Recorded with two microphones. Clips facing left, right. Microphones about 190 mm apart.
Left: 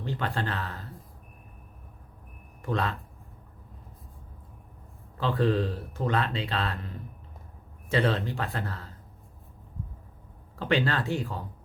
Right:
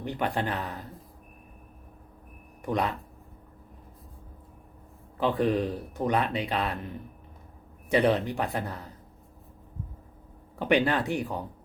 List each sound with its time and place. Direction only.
0.0 s speech: 15° right (ahead or behind)
2.6 s speech: 15° right (ahead or behind)
5.2 s speech: 15° right (ahead or behind)
10.6 s speech: 15° right (ahead or behind)